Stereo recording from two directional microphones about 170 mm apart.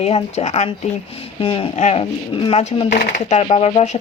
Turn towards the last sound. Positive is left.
turn(degrees=40)  # may be behind; listen again after turning